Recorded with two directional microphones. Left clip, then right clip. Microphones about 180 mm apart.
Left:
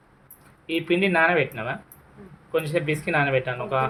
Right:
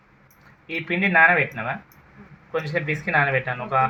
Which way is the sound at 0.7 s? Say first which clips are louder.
Even; 20° left (ahead or behind).